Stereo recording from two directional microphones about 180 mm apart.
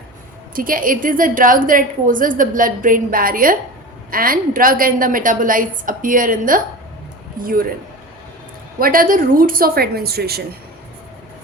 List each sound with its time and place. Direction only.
0.5 s a woman's voice: 50° right (ahead or behind)
8.8 s a woman's voice: 50° right (ahead or behind)